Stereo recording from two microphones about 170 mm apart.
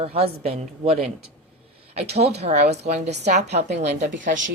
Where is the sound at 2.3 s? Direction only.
40° right (ahead or behind).